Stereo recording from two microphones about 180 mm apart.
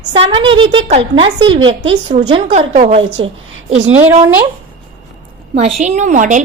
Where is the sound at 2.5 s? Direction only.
35° right (ahead or behind).